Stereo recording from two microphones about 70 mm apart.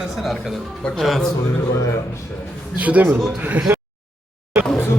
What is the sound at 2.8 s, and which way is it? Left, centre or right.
Speech, right.